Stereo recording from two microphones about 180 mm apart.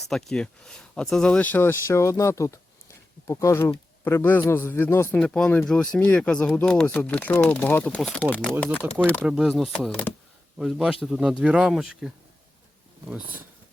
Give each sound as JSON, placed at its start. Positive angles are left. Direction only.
{"t": 0.0, "sound": "a man's voice", "side_deg": 0}
{"t": 9.2, "sound": "speech", "side_deg": -5}